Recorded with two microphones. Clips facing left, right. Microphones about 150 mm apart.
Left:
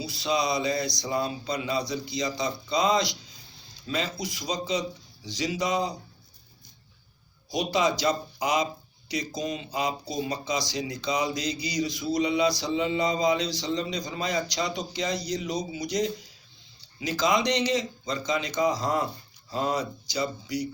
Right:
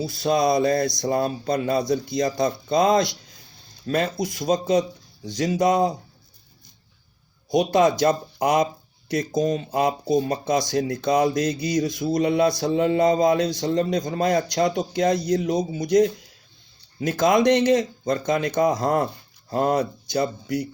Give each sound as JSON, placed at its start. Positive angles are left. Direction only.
{"t": 0.0, "sound": "speech", "side_deg": -50}
{"t": 7.5, "sound": "speech", "side_deg": -50}